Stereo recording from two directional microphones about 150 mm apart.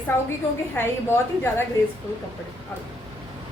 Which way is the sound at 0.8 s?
15° left (ahead or behind).